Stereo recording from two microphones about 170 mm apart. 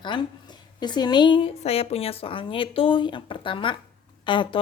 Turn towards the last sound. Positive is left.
turn(degrees=30)  # may be behind; listen again after turning